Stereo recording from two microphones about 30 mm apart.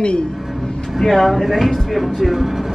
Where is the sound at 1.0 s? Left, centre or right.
Centre.